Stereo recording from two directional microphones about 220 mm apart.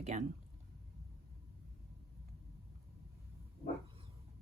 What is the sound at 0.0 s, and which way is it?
Speech, 30° right (ahead or behind).